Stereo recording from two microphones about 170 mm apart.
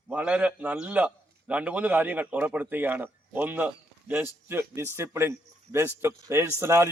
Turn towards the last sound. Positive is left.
turn(degrees=-15)  # may be behind; listen again after turning